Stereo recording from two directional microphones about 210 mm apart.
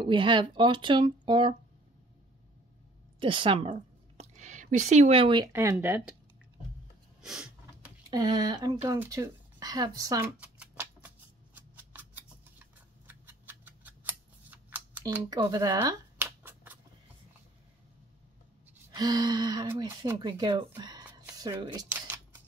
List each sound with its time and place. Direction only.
0.0 s speech: 25° right (ahead or behind)
3.2 s a woman's voice: 25° right (ahead or behind); by 6.1 s 10° right (ahead or behind)
7.2 s snort: 5° right (ahead or behind)
8.1 s speech: 20° right (ahead or behind)
10.4 s a sound: 5° right (ahead or behind)
15.2 s scissors: 20° right (ahead or behind)
18.9 s speech: 20° right (ahead or behind)